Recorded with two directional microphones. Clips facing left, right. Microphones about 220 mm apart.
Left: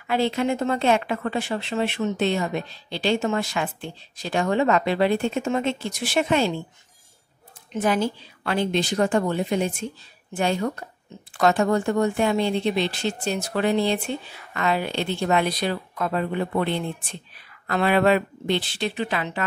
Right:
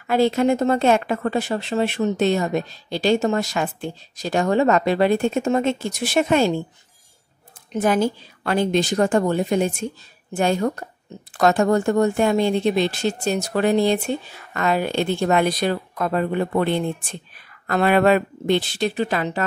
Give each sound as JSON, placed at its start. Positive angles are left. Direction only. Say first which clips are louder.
{"t": 0.0, "sound": "speech", "louder": "right 5 dB", "side_deg": -45}
{"t": 7.7, "sound": "speech", "louder": "right 3 dB", "side_deg": -45}